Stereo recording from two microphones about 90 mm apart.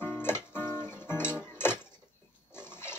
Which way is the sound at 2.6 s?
25° left (ahead or behind).